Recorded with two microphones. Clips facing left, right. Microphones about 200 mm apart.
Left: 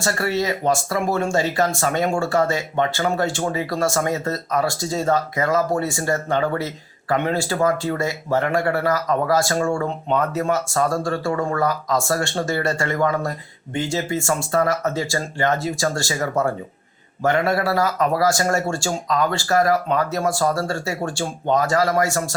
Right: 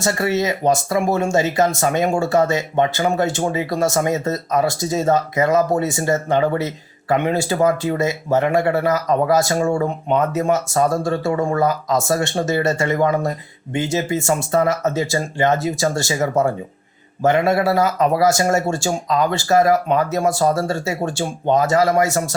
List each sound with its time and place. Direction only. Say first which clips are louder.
0.0 s speech: right 3 dB; 20° right (ahead or behind)